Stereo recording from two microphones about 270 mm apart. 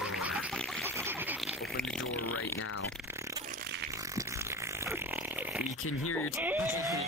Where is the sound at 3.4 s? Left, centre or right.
Right.